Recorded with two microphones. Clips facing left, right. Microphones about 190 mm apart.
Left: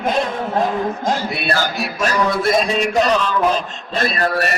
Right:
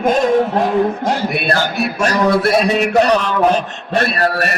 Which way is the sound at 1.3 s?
55° right (ahead or behind).